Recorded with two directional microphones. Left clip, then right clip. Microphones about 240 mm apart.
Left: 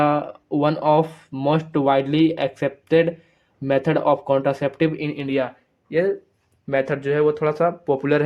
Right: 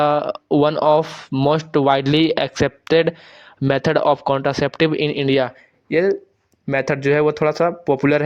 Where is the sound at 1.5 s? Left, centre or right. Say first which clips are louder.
Right 2 dB; right.